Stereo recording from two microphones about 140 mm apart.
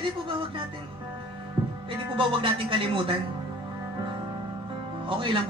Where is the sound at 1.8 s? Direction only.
35° right (ahead or behind).